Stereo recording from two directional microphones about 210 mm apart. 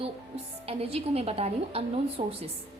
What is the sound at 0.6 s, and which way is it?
A woman's voice, 30° right (ahead or behind).